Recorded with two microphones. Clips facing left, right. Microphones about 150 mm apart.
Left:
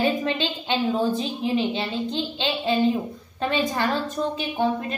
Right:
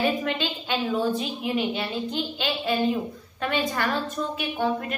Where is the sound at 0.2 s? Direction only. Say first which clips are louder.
Left 2 dB; 25° left (ahead or behind).